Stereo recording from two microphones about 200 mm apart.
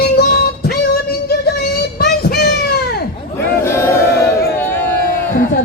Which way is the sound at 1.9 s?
50° left (ahead or behind).